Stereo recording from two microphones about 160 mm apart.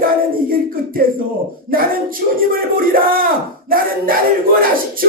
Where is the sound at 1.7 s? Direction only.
65° right (ahead or behind).